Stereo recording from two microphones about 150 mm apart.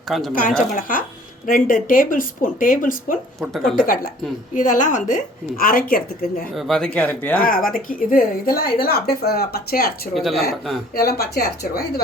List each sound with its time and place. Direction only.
0.3 s a woman's voice: 65° left (ahead or behind)
3.4 s speech: centre (ahead or behind)
4.5 s a woman's voice: 60° left (ahead or behind); by 6.5 s 75° left (ahead or behind)
6.5 s speech: centre (ahead or behind)
7.4 s a woman's voice: 70° left (ahead or behind); by 9.9 s 85° left
10.2 s speech: centre (ahead or behind)
10.9 s speech: 90° left